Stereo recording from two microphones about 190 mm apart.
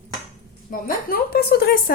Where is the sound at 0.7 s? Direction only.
50° left (ahead or behind).